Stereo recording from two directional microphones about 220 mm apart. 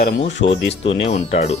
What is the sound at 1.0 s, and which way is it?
Speech, 30° left (ahead or behind).